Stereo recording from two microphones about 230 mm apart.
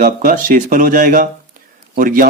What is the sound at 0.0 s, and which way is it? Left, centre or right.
Speech, right.